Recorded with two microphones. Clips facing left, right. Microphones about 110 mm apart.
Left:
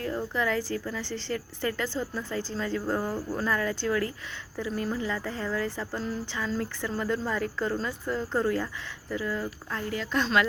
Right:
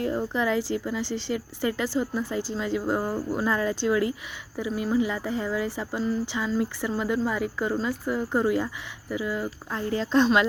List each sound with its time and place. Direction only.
0.0 s speech: 20° right (ahead or behind)